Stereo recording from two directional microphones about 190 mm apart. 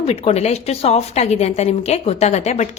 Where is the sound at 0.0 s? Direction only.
35° left (ahead or behind).